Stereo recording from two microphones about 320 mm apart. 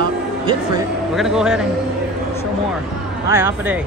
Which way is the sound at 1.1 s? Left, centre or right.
Centre.